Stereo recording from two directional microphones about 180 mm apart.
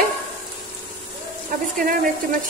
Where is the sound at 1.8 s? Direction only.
50° right (ahead or behind).